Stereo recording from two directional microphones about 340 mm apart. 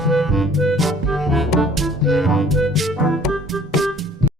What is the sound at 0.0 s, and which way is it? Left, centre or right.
Music, centre.